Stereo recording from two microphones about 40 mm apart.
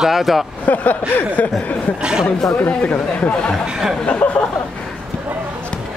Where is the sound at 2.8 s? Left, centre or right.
Left.